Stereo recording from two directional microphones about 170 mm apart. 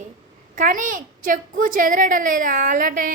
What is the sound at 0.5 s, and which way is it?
A woman's voice, 50° right (ahead or behind).